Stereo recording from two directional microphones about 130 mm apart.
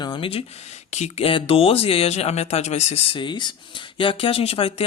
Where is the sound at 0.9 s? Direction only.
60° left (ahead or behind).